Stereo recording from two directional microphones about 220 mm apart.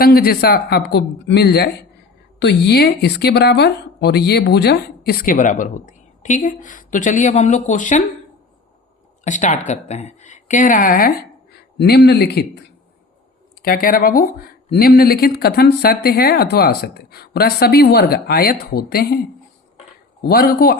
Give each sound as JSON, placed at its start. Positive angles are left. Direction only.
{"t": 0.0, "sound": "speech", "side_deg": 45}
{"t": 9.2, "sound": "speech", "side_deg": 35}
{"t": 20.2, "sound": "speech", "side_deg": 45}